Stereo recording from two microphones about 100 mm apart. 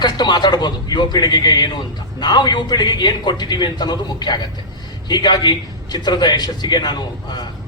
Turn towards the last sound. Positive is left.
turn(degrees=45)  # may be behind; listen again after turning